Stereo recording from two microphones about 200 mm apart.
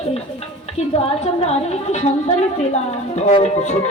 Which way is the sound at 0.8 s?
30° left (ahead or behind).